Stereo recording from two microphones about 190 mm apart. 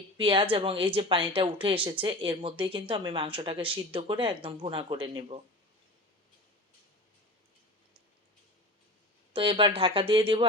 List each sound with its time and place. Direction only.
0.2 s speech: 25° right (ahead or behind)
9.3 s speech: 30° right (ahead or behind)